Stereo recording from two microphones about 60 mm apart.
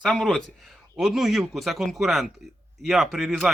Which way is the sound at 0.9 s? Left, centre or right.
Centre.